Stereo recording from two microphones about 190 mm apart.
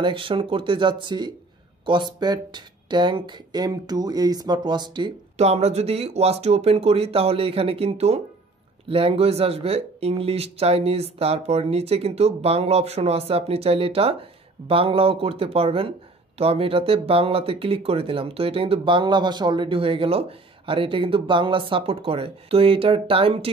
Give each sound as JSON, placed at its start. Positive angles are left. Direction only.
{"t": 0.0, "sound": "speech", "side_deg": -25}